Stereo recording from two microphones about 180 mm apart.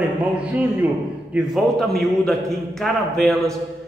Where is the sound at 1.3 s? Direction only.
Centre (ahead or behind).